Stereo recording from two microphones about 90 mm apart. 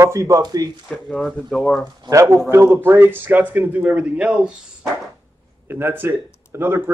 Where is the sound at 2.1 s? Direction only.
35° right (ahead or behind); by 4.3 s 15° right (ahead or behind).